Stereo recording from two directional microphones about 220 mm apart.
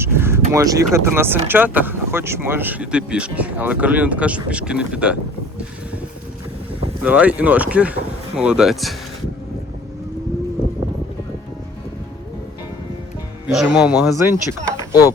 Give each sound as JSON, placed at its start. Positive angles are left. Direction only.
{"t": 0.0, "sound": "vehicle", "side_deg": -10}
{"t": 0.5, "sound": "speech", "side_deg": -15}
{"t": 7.0, "sound": "speech", "side_deg": -5}
{"t": 13.5, "sound": "speech", "side_deg": 0}
{"t": 14.8, "sound": "a sound", "side_deg": 15}